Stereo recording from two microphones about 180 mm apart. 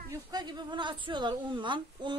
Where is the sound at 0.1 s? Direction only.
20° right (ahead or behind).